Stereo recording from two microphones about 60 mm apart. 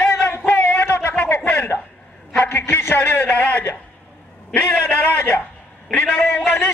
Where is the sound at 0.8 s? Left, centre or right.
Left.